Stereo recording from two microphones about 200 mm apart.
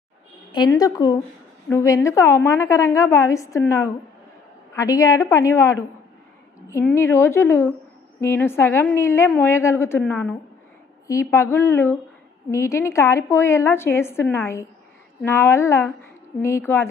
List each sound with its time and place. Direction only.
0.5 s a woman's voice: 20° left (ahead or behind)